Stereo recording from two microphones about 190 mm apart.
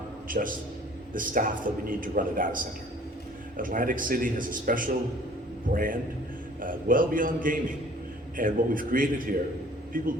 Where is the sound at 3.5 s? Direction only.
45° right (ahead or behind).